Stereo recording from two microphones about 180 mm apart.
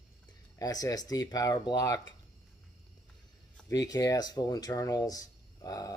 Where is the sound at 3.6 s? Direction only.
20° left (ahead or behind).